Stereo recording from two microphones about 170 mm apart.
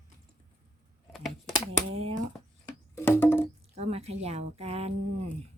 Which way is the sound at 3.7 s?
40° right (ahead or behind).